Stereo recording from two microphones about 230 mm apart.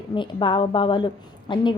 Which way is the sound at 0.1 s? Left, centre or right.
Left.